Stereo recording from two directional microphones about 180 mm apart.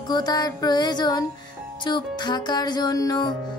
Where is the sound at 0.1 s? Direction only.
25° left (ahead or behind).